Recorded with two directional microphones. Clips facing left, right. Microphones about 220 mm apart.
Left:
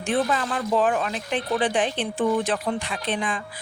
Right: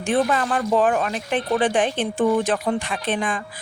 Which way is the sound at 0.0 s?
50° right (ahead or behind).